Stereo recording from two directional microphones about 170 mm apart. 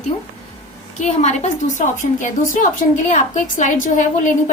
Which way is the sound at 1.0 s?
40° left (ahead or behind).